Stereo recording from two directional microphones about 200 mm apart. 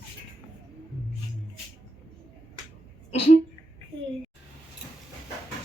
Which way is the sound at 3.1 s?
30° left (ahead or behind).